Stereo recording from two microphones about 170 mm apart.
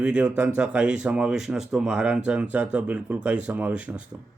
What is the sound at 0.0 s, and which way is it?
Speech, 5° right (ahead or behind).